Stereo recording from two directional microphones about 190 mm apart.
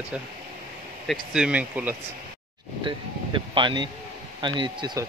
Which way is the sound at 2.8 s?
25° right (ahead or behind).